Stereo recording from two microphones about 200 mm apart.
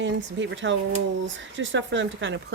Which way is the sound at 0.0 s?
65° right (ahead or behind).